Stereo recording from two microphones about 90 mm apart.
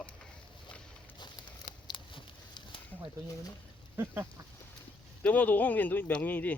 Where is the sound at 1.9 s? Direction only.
65° left (ahead or behind).